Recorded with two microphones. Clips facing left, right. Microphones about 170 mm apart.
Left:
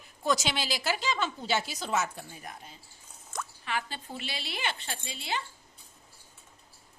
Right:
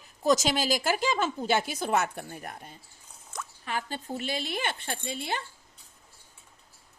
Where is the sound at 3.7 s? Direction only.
45° right (ahead or behind).